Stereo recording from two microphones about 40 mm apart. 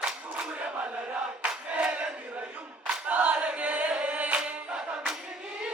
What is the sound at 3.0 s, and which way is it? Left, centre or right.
Choir, right.